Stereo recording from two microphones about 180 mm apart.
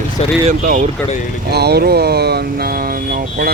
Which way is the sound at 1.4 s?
65° right (ahead or behind).